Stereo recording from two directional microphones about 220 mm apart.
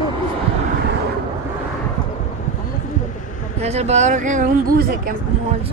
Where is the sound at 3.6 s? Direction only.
30° right (ahead or behind).